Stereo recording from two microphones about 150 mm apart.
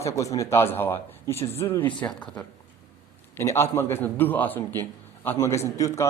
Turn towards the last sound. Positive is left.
turn(degrees=20)  # may be behind; listen again after turning